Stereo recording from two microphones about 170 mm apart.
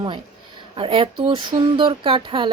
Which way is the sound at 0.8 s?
30° right (ahead or behind).